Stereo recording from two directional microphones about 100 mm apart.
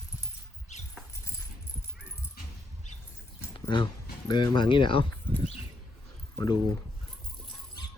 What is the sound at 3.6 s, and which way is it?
Speech, 50° left (ahead or behind).